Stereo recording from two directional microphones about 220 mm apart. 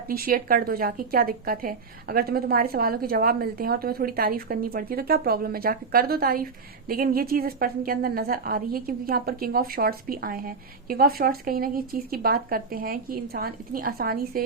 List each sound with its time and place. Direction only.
0.1 s a woman's voice: 40° right (ahead or behind)